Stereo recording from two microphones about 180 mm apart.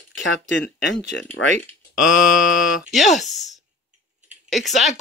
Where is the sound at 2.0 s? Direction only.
5° right (ahead or behind).